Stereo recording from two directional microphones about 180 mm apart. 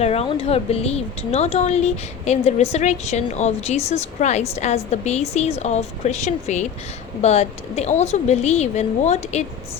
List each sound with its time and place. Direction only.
0.0 s speech: 35° left (ahead or behind)